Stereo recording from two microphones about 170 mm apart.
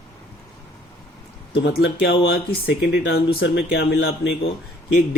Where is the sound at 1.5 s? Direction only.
90° left.